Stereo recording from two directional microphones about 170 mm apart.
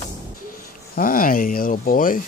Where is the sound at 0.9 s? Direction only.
55° left (ahead or behind).